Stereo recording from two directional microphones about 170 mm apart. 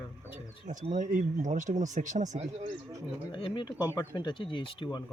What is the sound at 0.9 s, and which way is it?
Speech, 50° right (ahead or behind).